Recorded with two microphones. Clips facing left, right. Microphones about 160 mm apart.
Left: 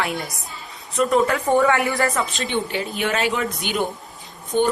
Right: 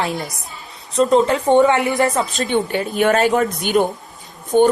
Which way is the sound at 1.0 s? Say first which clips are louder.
Right 4 dB; 25° right (ahead or behind).